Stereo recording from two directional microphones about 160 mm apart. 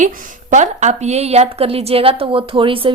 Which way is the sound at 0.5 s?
50° right (ahead or behind).